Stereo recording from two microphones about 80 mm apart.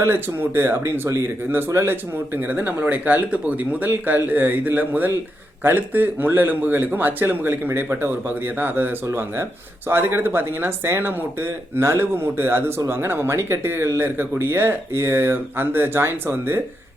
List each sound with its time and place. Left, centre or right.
0.0 s speech: right